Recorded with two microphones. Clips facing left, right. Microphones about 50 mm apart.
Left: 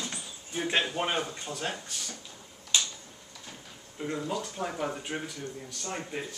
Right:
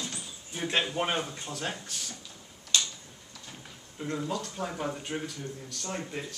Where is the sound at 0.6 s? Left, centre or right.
Centre.